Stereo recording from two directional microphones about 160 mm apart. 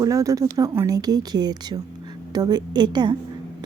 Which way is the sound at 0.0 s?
20° right (ahead or behind).